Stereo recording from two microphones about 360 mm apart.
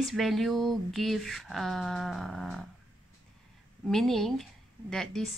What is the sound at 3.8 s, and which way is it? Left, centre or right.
A woman's voice, centre.